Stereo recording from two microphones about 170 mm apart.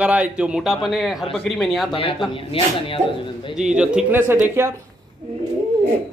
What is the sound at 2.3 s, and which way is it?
Speech, 30° left (ahead or behind).